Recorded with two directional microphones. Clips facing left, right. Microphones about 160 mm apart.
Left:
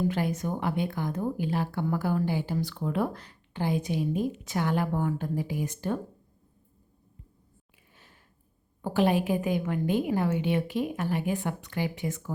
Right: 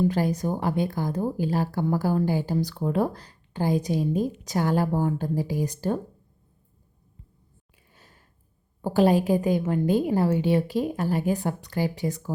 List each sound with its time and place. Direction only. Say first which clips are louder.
0.1 s a woman's voice: right 4 dB; 35° right (ahead or behind)
7.9 s sniff: right 2 dB; 40° right (ahead or behind)
8.8 s a woman's voice: right 4 dB; 35° right (ahead or behind)